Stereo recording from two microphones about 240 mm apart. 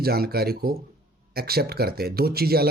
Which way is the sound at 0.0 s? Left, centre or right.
Right.